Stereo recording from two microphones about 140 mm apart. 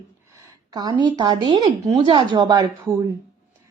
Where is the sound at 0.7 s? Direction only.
30° right (ahead or behind).